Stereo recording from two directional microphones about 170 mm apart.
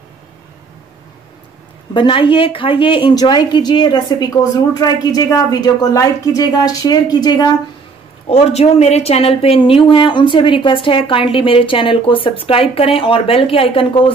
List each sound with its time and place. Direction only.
2.0 s a woman's voice: 30° left (ahead or behind)
8.3 s a woman's voice: 40° left (ahead or behind)